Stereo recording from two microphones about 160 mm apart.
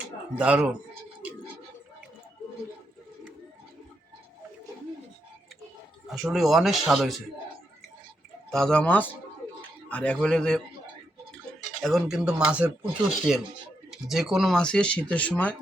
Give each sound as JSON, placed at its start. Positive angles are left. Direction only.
{"t": 0.3, "sound": "speech", "side_deg": -10}
{"t": 6.1, "sound": "speech", "side_deg": 0}
{"t": 8.4, "sound": "speech", "side_deg": 5}
{"t": 11.8, "sound": "speech", "side_deg": 0}